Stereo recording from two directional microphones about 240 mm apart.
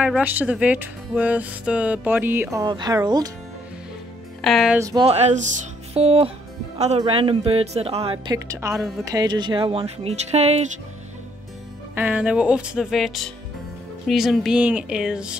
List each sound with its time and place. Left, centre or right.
0.0 s speech: centre
4.4 s speech: centre
4.7 s a woman's voice: centre
11.9 s speech: centre